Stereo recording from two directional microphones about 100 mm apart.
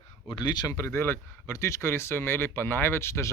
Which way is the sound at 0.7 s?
30° left (ahead or behind).